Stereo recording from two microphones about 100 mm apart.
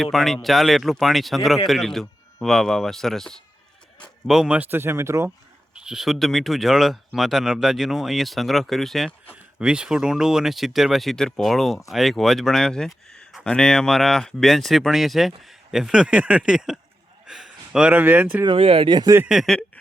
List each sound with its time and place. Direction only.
0.0 s speech: centre (ahead or behind)
4.3 s speech: 5° right (ahead or behind); by 5.3 s 30° right (ahead or behind)
5.8 s speech: 5° right (ahead or behind)
9.3 s speech: 10° right (ahead or behind)
18.4 s speech: 65° right (ahead or behind)
19.5 s a sound: 10° left (ahead or behind)